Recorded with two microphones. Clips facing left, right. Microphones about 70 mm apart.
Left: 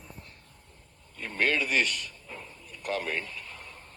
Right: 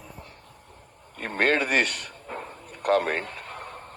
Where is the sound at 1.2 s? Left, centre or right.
Right.